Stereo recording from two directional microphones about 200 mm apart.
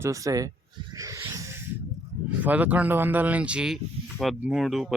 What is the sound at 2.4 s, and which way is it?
Speech, 10° right (ahead or behind).